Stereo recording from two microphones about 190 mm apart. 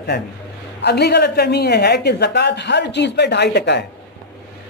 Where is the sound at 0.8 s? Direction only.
60° left (ahead or behind).